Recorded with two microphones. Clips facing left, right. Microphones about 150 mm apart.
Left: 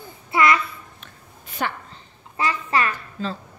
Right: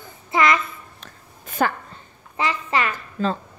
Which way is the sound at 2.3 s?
20° right (ahead or behind).